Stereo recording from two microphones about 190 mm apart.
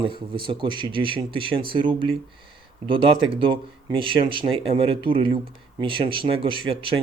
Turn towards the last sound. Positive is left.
turn(degrees=-30)  # may be behind; listen again after turning